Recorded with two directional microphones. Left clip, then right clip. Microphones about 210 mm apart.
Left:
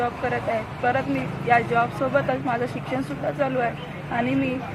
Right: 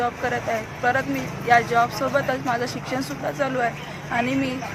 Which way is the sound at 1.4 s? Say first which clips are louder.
Right 2 dB; 5° right (ahead or behind).